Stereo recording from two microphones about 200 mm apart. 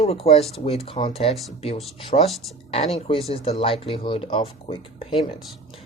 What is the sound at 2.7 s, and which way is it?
Speech, 30° left (ahead or behind).